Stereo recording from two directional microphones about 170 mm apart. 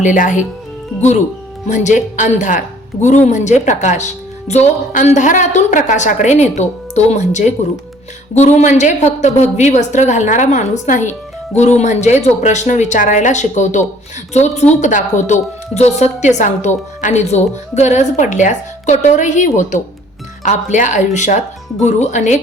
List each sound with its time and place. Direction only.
0.0 s a woman's voice: 50° left (ahead or behind)
1.6 s a woman's voice: 45° left (ahead or behind)